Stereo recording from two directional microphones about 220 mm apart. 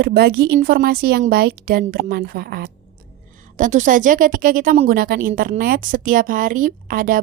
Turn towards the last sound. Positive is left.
turn(degrees=-40)  # may be behind; listen again after turning